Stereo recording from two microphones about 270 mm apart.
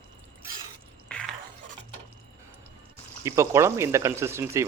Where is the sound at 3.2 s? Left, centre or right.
Centre.